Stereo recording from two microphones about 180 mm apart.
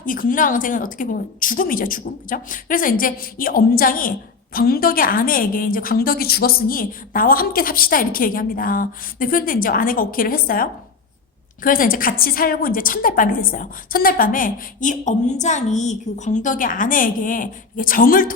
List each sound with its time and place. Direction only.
0.0 s a woman's voice: 50° left (ahead or behind)